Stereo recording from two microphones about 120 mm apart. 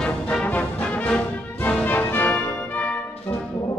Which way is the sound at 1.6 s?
15° left (ahead or behind).